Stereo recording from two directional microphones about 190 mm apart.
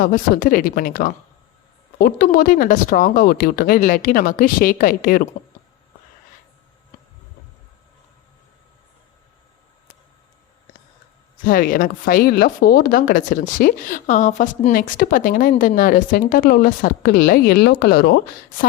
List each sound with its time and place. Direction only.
0.0 s speech: 45° left (ahead or behind)
11.4 s speech: 50° left (ahead or behind)